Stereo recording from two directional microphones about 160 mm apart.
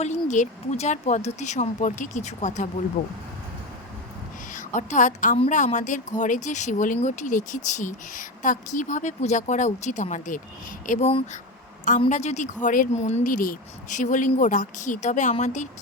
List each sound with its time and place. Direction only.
0.0 s speech: 45° left (ahead or behind)
4.5 s a woman's voice: 50° left (ahead or behind)